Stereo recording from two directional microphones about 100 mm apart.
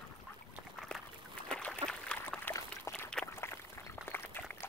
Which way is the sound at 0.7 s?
Centre (ahead or behind).